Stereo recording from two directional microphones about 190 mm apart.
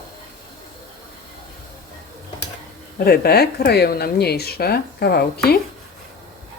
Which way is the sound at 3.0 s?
55° left (ahead or behind).